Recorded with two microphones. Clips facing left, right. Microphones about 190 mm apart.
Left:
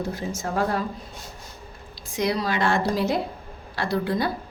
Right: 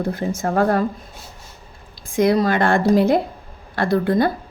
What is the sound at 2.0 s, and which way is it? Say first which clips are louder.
Speech: right 8 dB; 50° right (ahead or behind).